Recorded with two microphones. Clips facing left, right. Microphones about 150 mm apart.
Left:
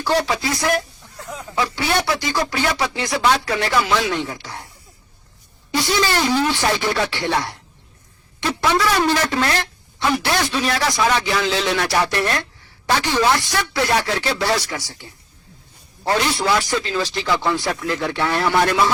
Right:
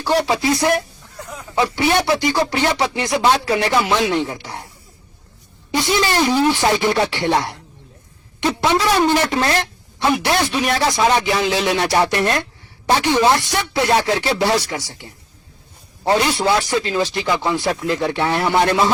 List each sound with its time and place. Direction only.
0.0 s speech: 25° right (ahead or behind)
1.3 s a sound: 20° left (ahead or behind)
1.5 s speech: 20° right (ahead or behind)
5.7 s a woman's voice: 20° right (ahead or behind)